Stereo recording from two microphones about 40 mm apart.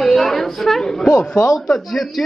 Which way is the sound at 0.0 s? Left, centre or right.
Centre.